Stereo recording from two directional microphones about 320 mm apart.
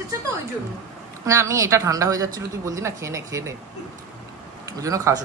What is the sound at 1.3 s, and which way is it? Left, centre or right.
A woman's voice, centre.